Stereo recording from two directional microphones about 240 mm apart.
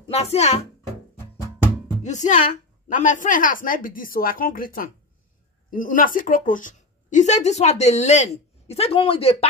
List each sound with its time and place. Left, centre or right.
0.1 s a woman's voice: left
2.0 s a woman's voice: left